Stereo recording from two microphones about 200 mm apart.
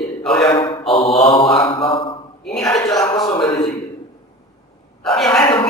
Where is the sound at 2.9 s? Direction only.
15° left (ahead or behind).